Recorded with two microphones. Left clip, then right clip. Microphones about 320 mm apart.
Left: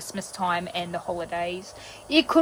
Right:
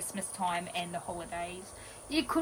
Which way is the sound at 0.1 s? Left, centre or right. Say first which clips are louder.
Left 7 dB; centre.